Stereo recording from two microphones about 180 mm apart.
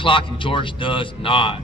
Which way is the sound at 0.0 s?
30° left (ahead or behind).